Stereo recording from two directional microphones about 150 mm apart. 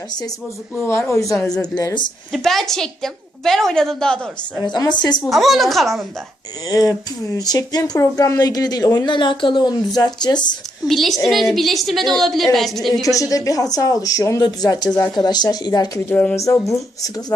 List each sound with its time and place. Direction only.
0.9 s speech: 15° left (ahead or behind)
2.3 s a woman's voice: centre (ahead or behind)
4.6 s speech: 30° left (ahead or behind)
5.2 s a woman's voice: centre (ahead or behind)
6.7 s speech: 25° left (ahead or behind)
10.8 s a woman's voice: centre (ahead or behind)
13.0 s speech: 20° left (ahead or behind)
16.0 s speech: 10° left (ahead or behind)